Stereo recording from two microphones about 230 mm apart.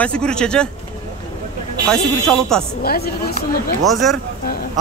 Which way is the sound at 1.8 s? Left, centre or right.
Centre.